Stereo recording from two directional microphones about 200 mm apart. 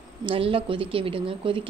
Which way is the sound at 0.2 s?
25° right (ahead or behind).